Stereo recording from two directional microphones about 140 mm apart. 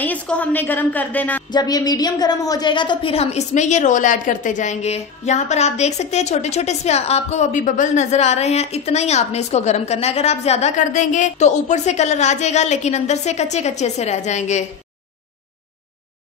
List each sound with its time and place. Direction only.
0.0 s a woman's voice: 10° left (ahead or behind)
1.5 s a woman's voice: 30° left (ahead or behind); by 14.7 s 55° left (ahead or behind)